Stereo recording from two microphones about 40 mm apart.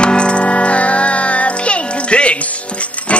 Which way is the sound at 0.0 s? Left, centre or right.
Left.